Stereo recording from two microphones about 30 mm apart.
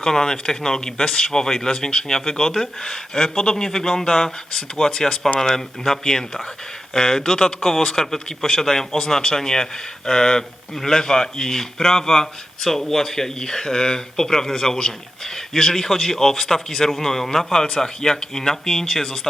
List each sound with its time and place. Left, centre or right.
0.0 s a man's voice: centre
8.4 s a man's voice: centre